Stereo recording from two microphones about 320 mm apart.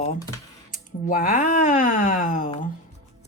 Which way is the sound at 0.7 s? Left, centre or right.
Left.